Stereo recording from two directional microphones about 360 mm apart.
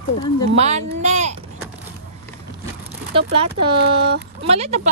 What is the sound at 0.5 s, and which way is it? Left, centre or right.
Speech, centre.